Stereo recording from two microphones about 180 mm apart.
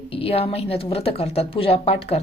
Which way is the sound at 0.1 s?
35° left (ahead or behind).